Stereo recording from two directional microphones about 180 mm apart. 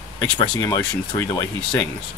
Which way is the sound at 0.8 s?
15° left (ahead or behind).